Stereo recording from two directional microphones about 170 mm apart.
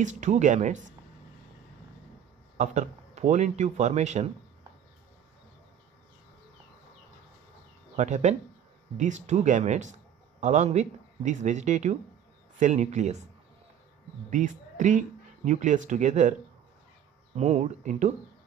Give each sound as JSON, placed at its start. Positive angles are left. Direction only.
{"t": 0.0, "sound": "speech", "side_deg": -45}
{"t": 2.5, "sound": "speech", "side_deg": -45}
{"t": 7.9, "sound": "speech", "side_deg": -45}
{"t": 14.3, "sound": "speech", "side_deg": -50}
{"t": 17.4, "sound": "speech", "side_deg": -40}